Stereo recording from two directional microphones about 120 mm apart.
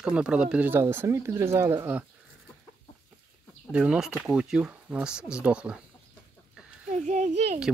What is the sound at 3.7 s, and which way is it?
Speech, 5° right (ahead or behind).